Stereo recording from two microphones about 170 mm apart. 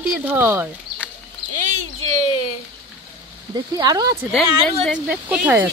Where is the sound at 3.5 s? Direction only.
25° right (ahead or behind).